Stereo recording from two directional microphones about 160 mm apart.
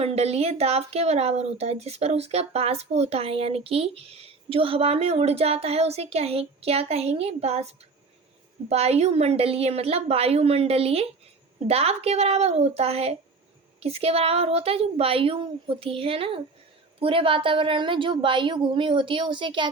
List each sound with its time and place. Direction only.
0.0 s speech: 40° right (ahead or behind)
8.7 s speech: 40° right (ahead or behind)